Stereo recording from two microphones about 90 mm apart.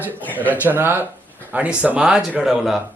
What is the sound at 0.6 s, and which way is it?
Speech, 20° right (ahead or behind).